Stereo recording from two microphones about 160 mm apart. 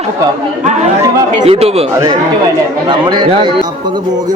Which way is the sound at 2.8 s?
25° right (ahead or behind).